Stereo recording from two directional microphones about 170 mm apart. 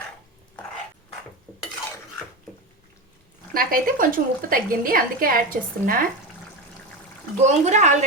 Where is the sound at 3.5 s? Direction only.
55° right (ahead or behind).